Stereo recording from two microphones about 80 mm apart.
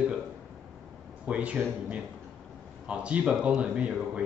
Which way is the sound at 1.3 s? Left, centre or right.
Centre.